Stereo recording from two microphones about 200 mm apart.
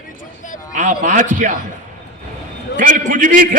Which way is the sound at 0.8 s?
40° right (ahead or behind).